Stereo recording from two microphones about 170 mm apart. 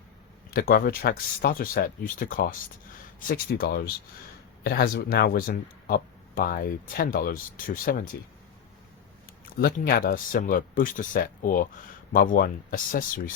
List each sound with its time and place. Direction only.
0.5 s speech: 60° left (ahead or behind)
9.6 s speech: 60° left (ahead or behind)